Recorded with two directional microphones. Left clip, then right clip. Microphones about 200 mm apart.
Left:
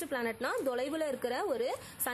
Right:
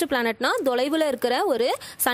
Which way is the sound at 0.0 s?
40° right (ahead or behind).